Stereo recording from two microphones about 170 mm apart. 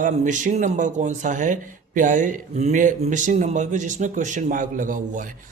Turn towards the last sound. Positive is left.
turn(degrees=-50)  # may be behind; listen again after turning